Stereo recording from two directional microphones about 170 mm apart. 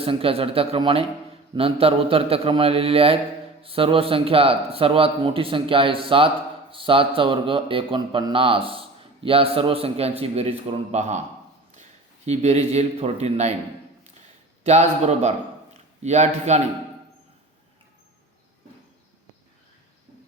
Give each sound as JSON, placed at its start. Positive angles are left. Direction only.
{"t": 0.0, "sound": "a man's voice", "side_deg": -35}
{"t": 14.6, "sound": "a man's voice", "side_deg": -40}